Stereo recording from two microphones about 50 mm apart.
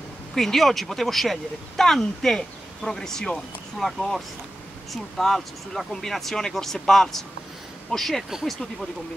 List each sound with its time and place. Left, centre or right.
0.3 s speech: centre